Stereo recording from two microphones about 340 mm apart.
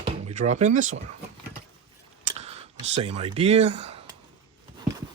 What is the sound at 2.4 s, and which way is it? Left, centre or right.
Speech, centre.